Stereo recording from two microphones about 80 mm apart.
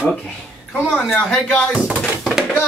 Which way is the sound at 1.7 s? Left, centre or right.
Centre.